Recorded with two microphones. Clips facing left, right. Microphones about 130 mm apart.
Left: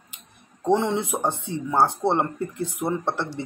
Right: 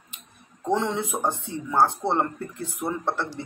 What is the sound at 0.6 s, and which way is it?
Speech, 20° left (ahead or behind).